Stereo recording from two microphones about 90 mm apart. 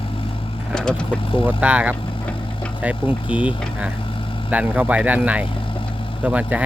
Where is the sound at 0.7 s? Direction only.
10° left (ahead or behind).